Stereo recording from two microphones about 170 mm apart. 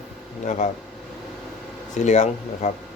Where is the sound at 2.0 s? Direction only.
40° left (ahead or behind).